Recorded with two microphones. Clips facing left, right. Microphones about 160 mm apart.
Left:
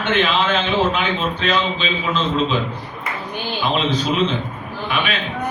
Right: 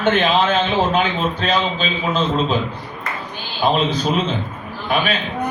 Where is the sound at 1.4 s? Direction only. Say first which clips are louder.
Even; 40° right (ahead or behind).